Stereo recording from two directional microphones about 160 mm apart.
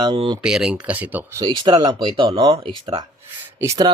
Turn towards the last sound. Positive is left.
turn(degrees=-20)  # may be behind; listen again after turning